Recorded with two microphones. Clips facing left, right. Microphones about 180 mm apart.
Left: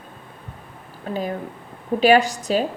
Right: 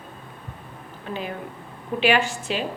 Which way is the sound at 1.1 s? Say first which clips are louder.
Left 5 dB; 40° left (ahead or behind).